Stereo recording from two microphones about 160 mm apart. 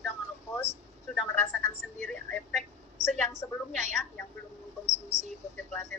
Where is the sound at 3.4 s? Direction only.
15° left (ahead or behind).